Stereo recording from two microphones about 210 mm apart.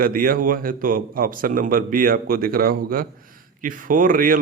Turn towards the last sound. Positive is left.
turn(degrees=-40)  # may be behind; listen again after turning